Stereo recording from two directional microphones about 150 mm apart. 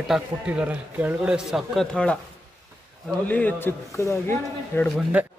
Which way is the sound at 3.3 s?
10° left (ahead or behind).